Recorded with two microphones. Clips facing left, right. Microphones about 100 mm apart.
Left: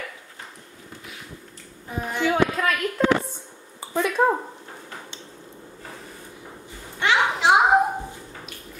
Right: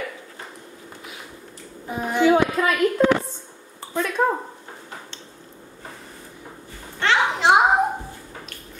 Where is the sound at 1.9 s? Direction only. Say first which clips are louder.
Right 6 dB; 10° right (ahead or behind).